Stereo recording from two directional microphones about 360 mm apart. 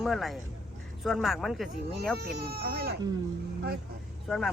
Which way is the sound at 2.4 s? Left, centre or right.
Right.